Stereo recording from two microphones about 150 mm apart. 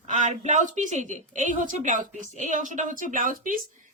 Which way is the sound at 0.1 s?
55° right (ahead or behind).